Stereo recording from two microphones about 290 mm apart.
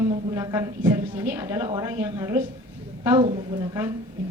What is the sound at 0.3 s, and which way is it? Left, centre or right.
Speech, centre.